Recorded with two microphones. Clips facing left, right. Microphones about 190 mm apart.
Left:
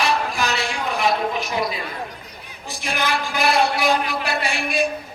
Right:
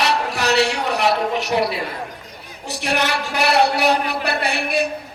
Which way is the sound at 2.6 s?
70° right (ahead or behind).